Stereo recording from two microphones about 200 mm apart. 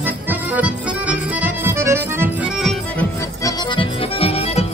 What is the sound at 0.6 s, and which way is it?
Accordion, 5° right (ahead or behind).